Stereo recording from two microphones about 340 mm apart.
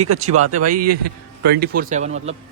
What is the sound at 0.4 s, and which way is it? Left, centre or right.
Speech, right.